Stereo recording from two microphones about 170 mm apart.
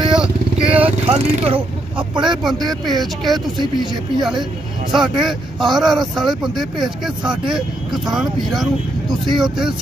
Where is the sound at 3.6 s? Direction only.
25° right (ahead or behind).